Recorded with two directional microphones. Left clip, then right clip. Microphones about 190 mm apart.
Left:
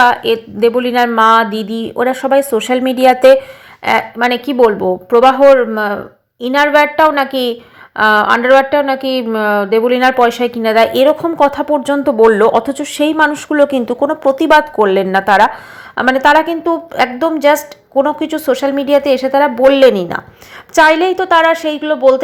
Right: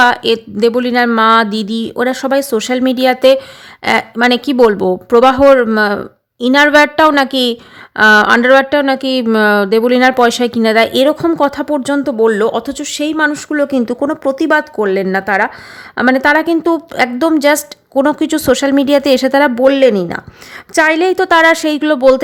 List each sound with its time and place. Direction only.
0.0 s a woman's voice: 30° right (ahead or behind)